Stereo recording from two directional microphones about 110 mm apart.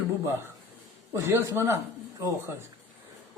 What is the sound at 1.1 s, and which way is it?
Speech, 25° right (ahead or behind).